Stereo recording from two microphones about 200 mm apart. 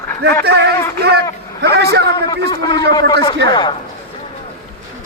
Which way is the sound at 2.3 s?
20° left (ahead or behind).